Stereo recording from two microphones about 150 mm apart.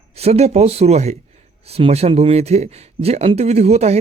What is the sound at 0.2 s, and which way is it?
Speech, 45° right (ahead or behind).